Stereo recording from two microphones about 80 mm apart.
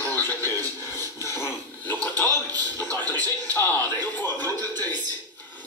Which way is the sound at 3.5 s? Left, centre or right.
Left.